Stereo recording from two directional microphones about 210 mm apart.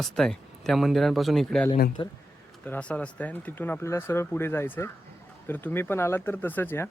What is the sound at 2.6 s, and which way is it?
Speech, 5° left (ahead or behind).